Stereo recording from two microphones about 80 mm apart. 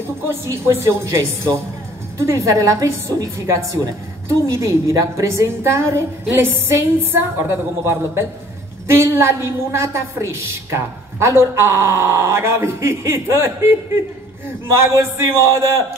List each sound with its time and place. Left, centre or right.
0.3 s a woman's voice: right